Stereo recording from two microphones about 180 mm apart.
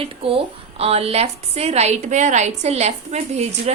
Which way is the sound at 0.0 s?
30° right (ahead or behind).